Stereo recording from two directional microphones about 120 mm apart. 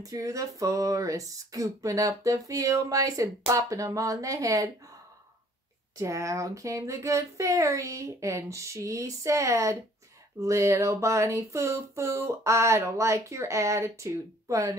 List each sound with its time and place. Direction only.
0.0 s speech: 30° right (ahead or behind)
5.9 s speech: 25° right (ahead or behind)